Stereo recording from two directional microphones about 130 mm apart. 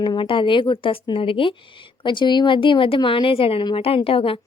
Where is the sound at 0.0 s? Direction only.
40° left (ahead or behind).